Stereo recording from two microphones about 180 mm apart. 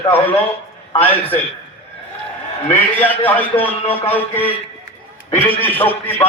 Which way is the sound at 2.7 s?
10° left (ahead or behind).